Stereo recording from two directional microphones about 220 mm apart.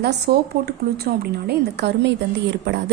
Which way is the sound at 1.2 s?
50° right (ahead or behind).